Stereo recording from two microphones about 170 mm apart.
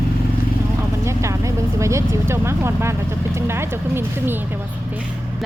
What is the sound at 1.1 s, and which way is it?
Speech, 15° right (ahead or behind).